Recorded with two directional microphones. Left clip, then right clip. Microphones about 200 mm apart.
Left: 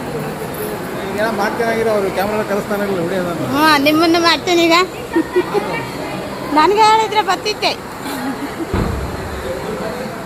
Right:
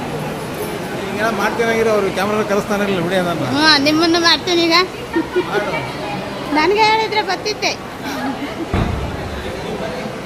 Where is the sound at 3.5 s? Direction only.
Centre (ahead or behind).